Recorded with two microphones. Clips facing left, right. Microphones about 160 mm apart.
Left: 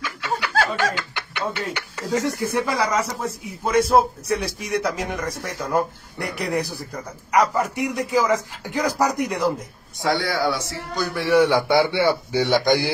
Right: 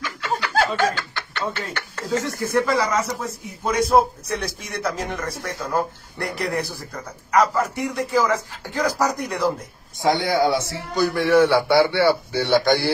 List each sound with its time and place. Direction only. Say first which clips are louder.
0.0 s snicker: right 1 dB; 10° left (ahead or behind)
3.6 s a man's voice: left 1 dB; centre (ahead or behind)
10.0 s a man's voice: right 3 dB; 20° right (ahead or behind)
11.1 s a man's voice: even; 10° left (ahead or behind)